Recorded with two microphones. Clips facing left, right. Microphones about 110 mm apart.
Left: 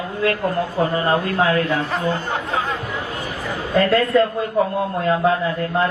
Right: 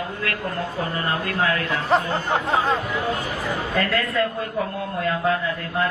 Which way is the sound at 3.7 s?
30° left (ahead or behind).